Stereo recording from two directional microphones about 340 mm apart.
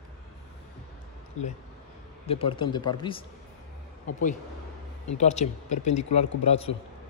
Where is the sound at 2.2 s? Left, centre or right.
Centre.